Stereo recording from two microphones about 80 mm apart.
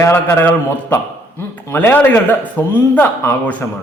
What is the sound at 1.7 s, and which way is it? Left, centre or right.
A man's voice, left.